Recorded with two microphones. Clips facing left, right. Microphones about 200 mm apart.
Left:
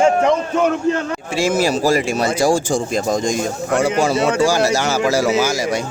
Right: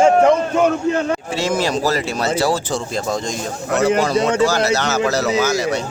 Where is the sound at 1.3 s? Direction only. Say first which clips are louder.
Left 5 dB; 10° left (ahead or behind).